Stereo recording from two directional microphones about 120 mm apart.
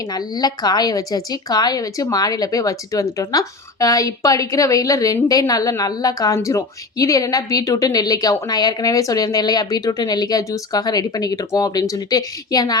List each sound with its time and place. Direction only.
0.0 s a woman's voice: 35° left (ahead or behind)